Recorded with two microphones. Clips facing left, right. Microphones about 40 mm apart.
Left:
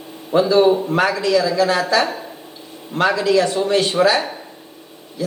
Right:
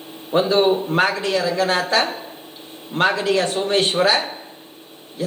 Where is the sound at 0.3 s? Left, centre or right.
Right.